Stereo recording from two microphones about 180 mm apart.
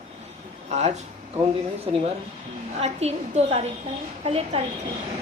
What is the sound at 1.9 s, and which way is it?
A woman's voice, 30° right (ahead or behind).